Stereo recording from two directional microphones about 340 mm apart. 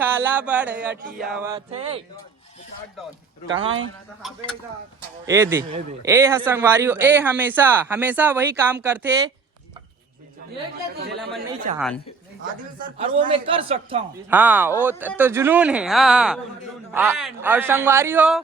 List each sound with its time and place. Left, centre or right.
0.0 s a sound: centre
1.4 s a man's voice: centre
4.2 s a man's voice: centre
11.7 s a man's voice: right
14.3 s a man's voice: centre